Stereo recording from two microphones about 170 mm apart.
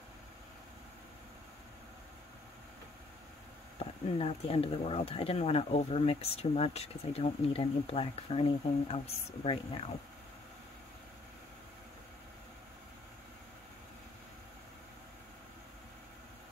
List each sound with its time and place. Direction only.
3.8 s speech: 35° left (ahead or behind)